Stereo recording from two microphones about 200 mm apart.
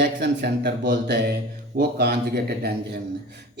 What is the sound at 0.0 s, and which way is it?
A woman's voice, 55° right (ahead or behind).